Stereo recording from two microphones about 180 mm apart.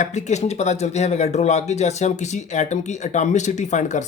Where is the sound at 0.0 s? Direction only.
40° left (ahead or behind).